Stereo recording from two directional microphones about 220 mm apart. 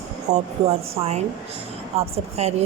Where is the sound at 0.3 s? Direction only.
30° right (ahead or behind).